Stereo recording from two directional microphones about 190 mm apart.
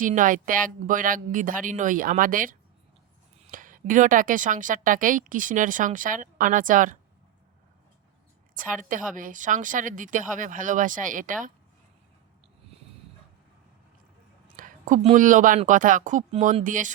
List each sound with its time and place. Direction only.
0.0 s a woman's voice: 45° right (ahead or behind)
8.5 s a woman's voice: 45° right (ahead or behind)
14.5 s a woman's voice: 45° right (ahead or behind)